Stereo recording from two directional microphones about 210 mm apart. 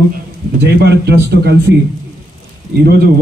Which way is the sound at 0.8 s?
50° right (ahead or behind).